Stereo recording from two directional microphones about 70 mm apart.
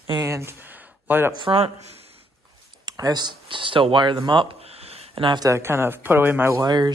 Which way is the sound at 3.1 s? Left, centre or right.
Right.